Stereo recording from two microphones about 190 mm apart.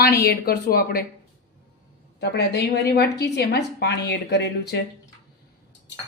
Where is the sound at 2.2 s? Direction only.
60° left (ahead or behind).